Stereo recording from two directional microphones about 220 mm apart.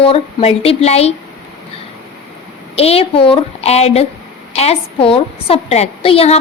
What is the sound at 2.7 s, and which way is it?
A woman's voice, 25° left (ahead or behind).